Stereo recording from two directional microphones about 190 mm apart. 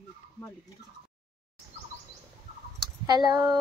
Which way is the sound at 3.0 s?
20° right (ahead or behind).